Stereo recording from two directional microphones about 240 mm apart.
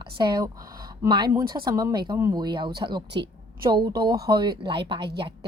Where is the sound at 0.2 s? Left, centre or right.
Centre.